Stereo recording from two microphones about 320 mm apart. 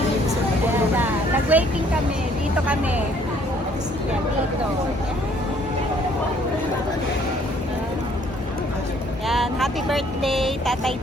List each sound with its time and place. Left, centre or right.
0.9 s vehicle: centre
9.2 s speech: centre